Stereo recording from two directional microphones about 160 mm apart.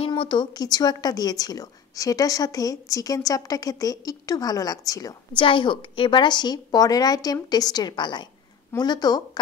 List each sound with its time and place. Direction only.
0.0 s a woman's voice: 30° left (ahead or behind)